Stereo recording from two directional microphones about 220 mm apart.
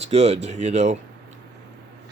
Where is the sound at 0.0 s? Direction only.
30° right (ahead or behind).